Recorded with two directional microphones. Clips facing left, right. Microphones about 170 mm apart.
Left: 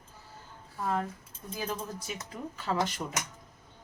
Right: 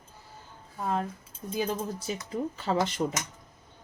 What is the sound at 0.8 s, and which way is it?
Speech, 20° right (ahead or behind).